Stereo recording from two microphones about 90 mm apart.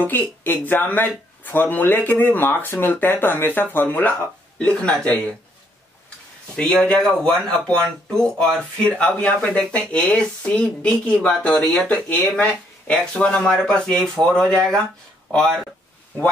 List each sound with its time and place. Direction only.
0.0 s speech: 20° left (ahead or behind)
6.5 s speech: 10° left (ahead or behind)